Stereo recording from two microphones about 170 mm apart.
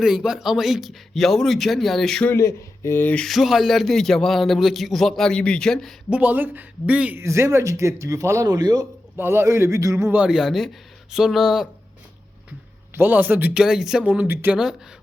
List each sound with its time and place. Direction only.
0.0 s speech: 5° right (ahead or behind)
2.3 s speech: 15° left (ahead or behind)
6.1 s speech: 10° right (ahead or behind)
12.9 s speech: 10° right (ahead or behind)